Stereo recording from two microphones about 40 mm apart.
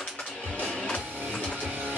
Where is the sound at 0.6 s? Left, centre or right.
Centre.